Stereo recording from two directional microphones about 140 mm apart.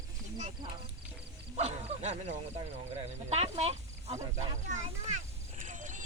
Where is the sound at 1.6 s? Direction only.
50° right (ahead or behind).